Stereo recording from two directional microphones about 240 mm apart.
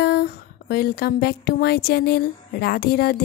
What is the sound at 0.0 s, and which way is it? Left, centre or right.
Speech, left.